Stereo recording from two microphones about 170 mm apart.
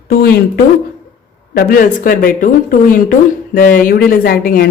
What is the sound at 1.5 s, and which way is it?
A woman's voice, 55° left (ahead or behind).